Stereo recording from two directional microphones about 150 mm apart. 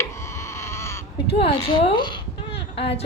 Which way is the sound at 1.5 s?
35° left (ahead or behind).